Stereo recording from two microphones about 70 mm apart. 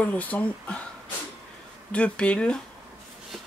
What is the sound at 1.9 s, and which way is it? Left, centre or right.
Speech, centre.